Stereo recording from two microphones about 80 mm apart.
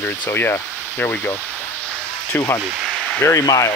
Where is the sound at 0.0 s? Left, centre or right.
Left.